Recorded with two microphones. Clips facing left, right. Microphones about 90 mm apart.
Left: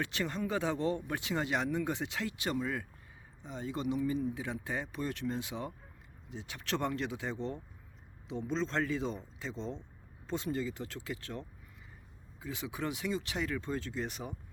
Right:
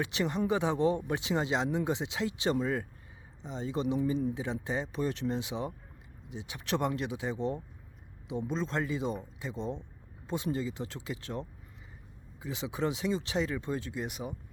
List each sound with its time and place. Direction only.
0.0 s speech: 15° right (ahead or behind)